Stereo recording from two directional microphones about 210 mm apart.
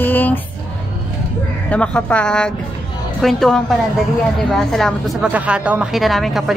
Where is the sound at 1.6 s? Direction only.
5° left (ahead or behind).